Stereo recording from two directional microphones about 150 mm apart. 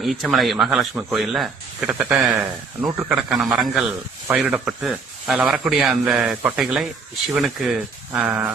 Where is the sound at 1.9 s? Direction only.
10° right (ahead or behind).